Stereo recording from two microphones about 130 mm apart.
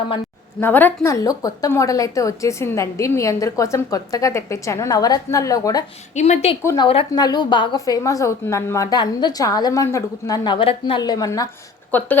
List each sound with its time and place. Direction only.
0.6 s a woman's voice: 15° left (ahead or behind)
6.1 s a woman's voice: 60° left (ahead or behind)
6.7 s a woman's voice: 45° left (ahead or behind)
7.1 s a woman's voice: 30° left (ahead or behind)
11.9 s speech: 15° left (ahead or behind)